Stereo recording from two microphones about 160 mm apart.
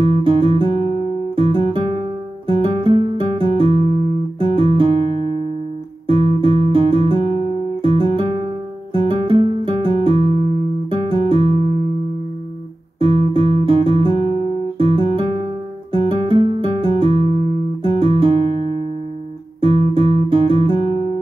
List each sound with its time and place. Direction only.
0.0 s music: 35° right (ahead or behind)
6.0 s guitar: 35° right (ahead or behind)
7.8 s music: 35° right (ahead or behind)
13.0 s guitar: 35° right (ahead or behind)
14.8 s music: 35° right (ahead or behind)
19.6 s guitar: 35° right (ahead or behind)